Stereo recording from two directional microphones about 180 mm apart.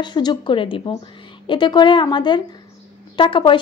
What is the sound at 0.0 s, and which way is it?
A woman's voice, 25° left (ahead or behind).